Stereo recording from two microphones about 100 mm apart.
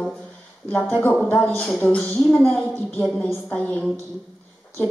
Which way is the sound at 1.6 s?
5° left (ahead or behind).